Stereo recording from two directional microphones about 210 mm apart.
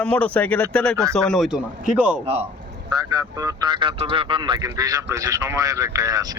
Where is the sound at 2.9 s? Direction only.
20° right (ahead or behind).